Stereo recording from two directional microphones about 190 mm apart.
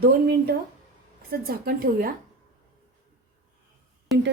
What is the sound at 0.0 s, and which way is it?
A woman's voice, 55° right (ahead or behind).